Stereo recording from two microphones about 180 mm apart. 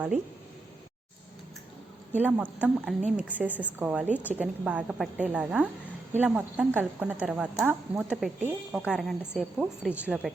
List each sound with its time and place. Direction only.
2.1 s a woman's voice: 10° right (ahead or behind)